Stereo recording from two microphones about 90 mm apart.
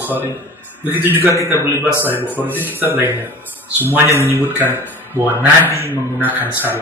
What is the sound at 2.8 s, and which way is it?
Speech, 25° right (ahead or behind).